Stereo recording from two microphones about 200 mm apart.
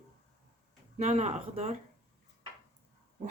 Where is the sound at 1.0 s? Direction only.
35° right (ahead or behind).